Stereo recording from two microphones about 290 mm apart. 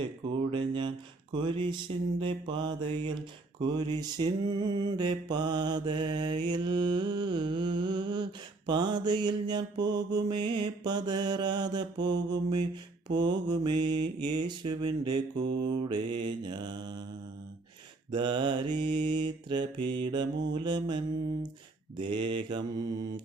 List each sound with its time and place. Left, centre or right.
0.5 s mantra: centre
18.1 s mantra: centre